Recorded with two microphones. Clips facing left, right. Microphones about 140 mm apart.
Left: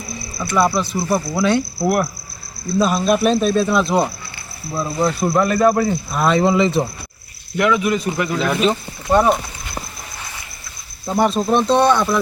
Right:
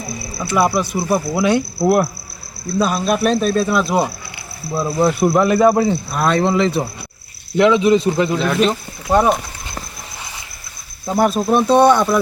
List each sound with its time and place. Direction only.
0.5 s speech: 10° right (ahead or behind)
1.8 s a man's voice: 25° right (ahead or behind)
2.7 s speech: centre (ahead or behind)
6.1 s speech: centre (ahead or behind)
7.5 s a man's voice: 25° right (ahead or behind)
8.4 s speech: centre (ahead or behind)
11.1 s speech: 5° right (ahead or behind)